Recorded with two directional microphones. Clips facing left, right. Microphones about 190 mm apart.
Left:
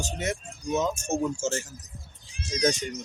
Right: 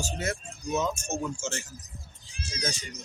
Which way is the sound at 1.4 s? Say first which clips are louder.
Left 6 dB; 45° left (ahead or behind).